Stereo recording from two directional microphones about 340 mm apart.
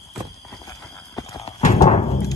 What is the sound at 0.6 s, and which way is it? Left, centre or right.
Clip-clop, centre.